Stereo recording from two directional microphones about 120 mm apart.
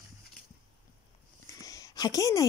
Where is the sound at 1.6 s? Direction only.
30° left (ahead or behind).